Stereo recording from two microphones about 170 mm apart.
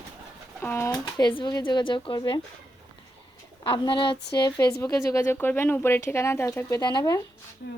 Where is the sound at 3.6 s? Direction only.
30° left (ahead or behind); by 6.8 s 15° left (ahead or behind).